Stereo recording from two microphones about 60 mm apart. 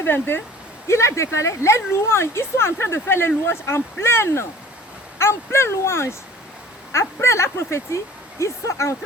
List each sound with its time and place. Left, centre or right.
0.0 s speech: left
0.9 s speech: left